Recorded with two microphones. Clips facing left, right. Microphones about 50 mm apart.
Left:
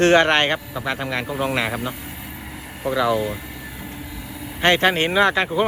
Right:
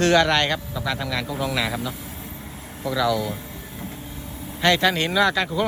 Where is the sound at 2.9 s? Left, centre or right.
Left.